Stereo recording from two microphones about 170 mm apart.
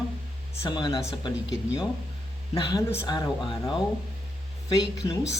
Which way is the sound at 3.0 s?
25° left (ahead or behind).